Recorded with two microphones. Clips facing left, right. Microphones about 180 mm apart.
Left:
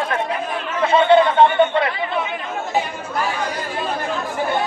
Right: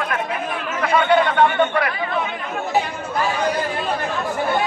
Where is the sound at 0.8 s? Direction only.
25° left (ahead or behind).